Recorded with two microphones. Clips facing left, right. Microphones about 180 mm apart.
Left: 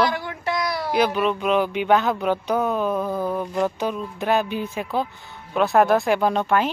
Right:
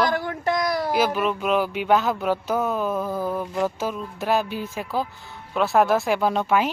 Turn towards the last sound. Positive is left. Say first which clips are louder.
# left 1 dB
turn(degrees=-5)  # may be behind; listen again after turning